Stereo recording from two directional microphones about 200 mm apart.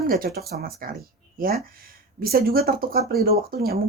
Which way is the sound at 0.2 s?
45° right (ahead or behind).